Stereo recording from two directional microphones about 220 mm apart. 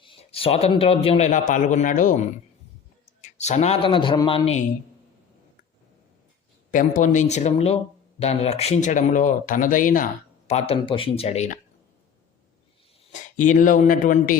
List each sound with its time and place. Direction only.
0.0 s a man's voice: 25° left (ahead or behind)
3.2 s a man's voice: 30° left (ahead or behind)
6.7 s speech: 35° left (ahead or behind)
13.1 s speech: 35° left (ahead or behind)